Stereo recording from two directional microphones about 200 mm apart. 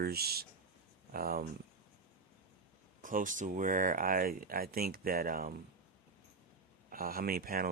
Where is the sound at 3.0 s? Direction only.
40° right (ahead or behind).